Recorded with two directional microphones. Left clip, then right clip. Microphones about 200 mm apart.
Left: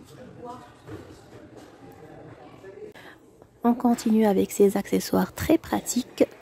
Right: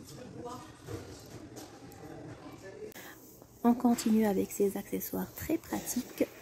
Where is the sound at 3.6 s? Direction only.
10° left (ahead or behind).